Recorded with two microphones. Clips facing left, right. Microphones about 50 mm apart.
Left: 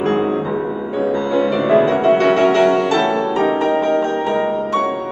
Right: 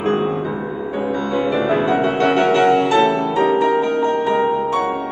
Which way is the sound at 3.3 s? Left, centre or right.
Left.